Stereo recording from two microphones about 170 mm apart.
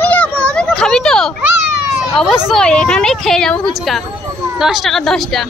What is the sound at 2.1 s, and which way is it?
Speech, centre (ahead or behind).